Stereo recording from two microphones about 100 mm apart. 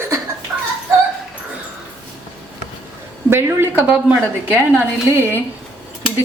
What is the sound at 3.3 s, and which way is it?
Speech, 25° right (ahead or behind).